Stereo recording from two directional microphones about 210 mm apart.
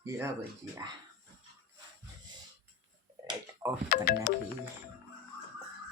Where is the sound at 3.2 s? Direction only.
20° right (ahead or behind).